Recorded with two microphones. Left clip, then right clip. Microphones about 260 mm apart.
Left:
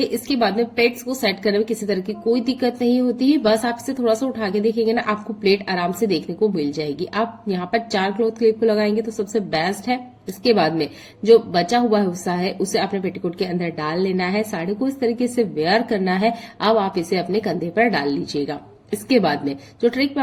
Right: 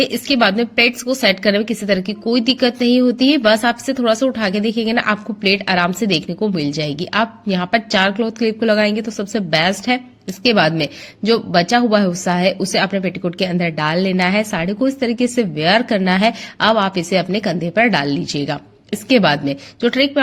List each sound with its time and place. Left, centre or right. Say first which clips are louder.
0.0 s a woman's voice: right 5 dB; right